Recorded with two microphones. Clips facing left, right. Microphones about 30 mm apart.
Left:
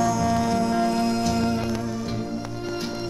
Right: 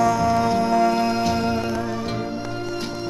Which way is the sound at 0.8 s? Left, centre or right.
Right.